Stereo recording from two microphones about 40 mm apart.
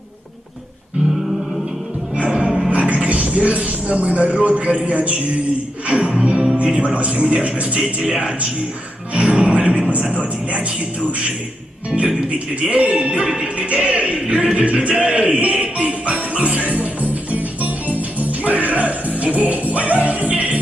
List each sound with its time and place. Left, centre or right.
2.1 s music: right
2.6 s a man's voice: right
9.1 s music: right
9.9 s a man's voice: right
12.5 s speech: right
16.7 s music: right